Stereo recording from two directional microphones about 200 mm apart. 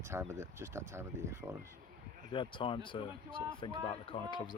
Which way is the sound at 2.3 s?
25° left (ahead or behind).